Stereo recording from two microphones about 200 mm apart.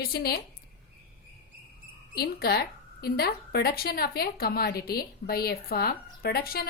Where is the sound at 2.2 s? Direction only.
50° left (ahead or behind).